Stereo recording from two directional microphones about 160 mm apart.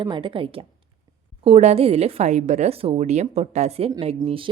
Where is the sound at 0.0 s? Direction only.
30° right (ahead or behind).